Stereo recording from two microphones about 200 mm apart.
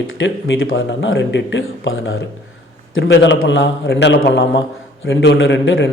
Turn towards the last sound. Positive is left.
turn(degrees=65)  # may be behind; listen again after turning